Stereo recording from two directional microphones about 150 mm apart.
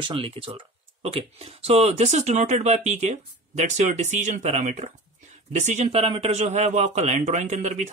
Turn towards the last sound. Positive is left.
turn(degrees=-50)  # may be behind; listen again after turning